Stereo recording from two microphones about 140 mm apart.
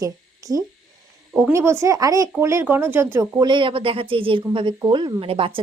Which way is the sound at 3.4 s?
35° right (ahead or behind).